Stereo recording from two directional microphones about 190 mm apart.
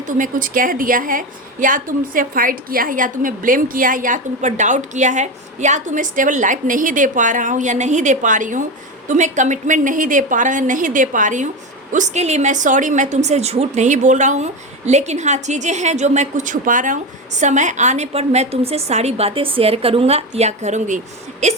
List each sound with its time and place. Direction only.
0.0 s a woman's voice: 45° right (ahead or behind)